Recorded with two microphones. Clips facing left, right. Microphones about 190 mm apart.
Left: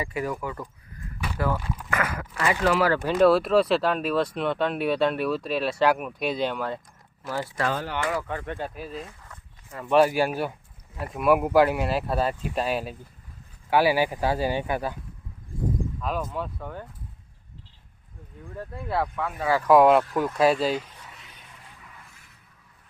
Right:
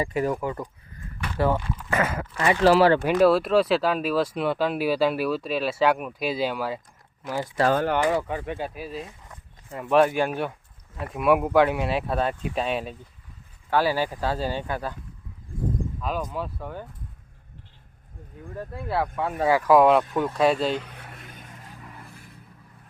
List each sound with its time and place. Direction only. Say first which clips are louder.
0.0 s speech: right 4 dB; 30° right (ahead or behind)
3.1 s speech: even; 5° right (ahead or behind)
7.7 s speech: right 7 dB; 55° right (ahead or behind)
8.0 s speech: right 4 dB; 15° right (ahead or behind)
9.0 s a sound: right 1 dB; 20° right (ahead or behind)
9.8 s speech: even; centre (ahead or behind)
16.0 s speech: even; centre (ahead or behind)
18.9 s speech: right 1 dB; 5° right (ahead or behind)
20.7 s a sound: even; 60° right (ahead or behind); by 22.2 s 35° right (ahead or behind)